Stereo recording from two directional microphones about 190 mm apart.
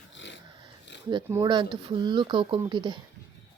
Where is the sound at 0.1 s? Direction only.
70° left (ahead or behind).